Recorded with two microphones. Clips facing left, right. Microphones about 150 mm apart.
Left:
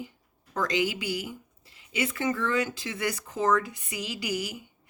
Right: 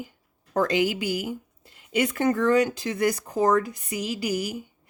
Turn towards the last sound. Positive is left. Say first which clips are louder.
# right 5 dB
turn(degrees=-40)  # may be behind; listen again after turning